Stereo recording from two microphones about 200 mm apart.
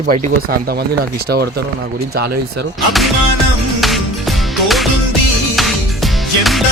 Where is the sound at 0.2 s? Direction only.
50° right (ahead or behind).